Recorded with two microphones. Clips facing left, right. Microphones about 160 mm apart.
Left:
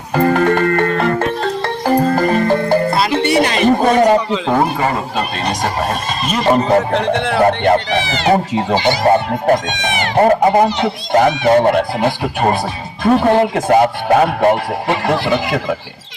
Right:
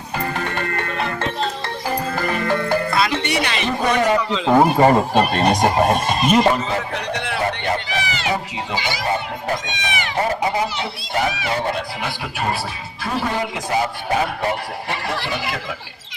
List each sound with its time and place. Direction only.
0.1 s music: 50° left (ahead or behind)
2.0 s music: 40° left (ahead or behind)
5.6 s speech: 20° right (ahead or behind)
6.5 s speech: 45° left (ahead or behind)
6.9 s a man's voice: 60° left (ahead or behind)